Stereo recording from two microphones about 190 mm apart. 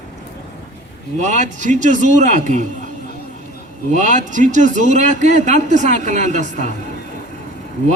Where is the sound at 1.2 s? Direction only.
40° right (ahead or behind).